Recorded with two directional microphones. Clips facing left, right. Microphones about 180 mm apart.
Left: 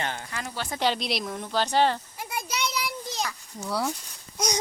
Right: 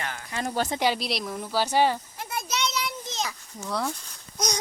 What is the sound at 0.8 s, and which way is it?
Speech, 5° right (ahead or behind).